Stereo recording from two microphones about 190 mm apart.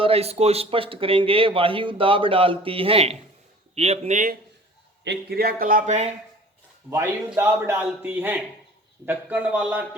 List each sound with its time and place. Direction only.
0.0 s speech: 30° right (ahead or behind)
5.0 s speech: 55° right (ahead or behind); by 6.1 s 40° right (ahead or behind)
6.9 s speech: 15° right (ahead or behind)